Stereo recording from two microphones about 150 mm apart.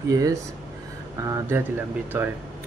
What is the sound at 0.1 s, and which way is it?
Speech, 20° right (ahead or behind).